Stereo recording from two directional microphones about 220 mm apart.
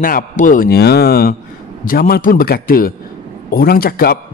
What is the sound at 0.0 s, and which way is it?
A man's voice, 40° left (ahead or behind).